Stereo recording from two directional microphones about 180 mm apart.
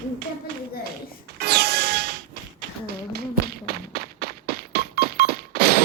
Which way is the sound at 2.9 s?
60° right (ahead or behind).